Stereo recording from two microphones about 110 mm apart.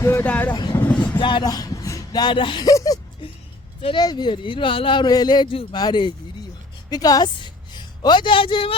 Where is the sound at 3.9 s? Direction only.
40° left (ahead or behind).